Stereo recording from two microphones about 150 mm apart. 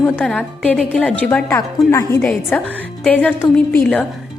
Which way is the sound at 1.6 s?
20° left (ahead or behind).